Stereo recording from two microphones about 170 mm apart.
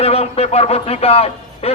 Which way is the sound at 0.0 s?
35° left (ahead or behind).